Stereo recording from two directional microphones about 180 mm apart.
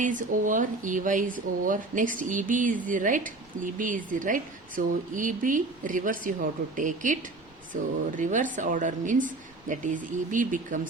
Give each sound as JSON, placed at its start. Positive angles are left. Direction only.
{"t": 0.0, "sound": "speech", "side_deg": -45}